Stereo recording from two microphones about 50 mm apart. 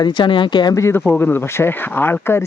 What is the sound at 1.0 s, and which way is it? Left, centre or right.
Speech, left.